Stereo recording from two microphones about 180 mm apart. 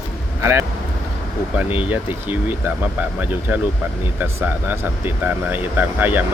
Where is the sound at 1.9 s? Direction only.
10° right (ahead or behind).